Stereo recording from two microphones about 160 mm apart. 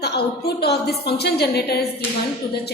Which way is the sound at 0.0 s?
90° left.